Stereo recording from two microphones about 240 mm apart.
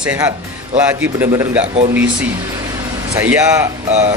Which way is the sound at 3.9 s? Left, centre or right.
Right.